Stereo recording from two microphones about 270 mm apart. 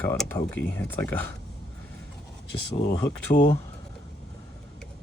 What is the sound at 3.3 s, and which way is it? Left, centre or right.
Speech, left.